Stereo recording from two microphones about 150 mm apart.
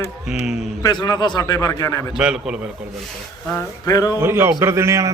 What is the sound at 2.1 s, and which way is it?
Speech, 5° right (ahead or behind).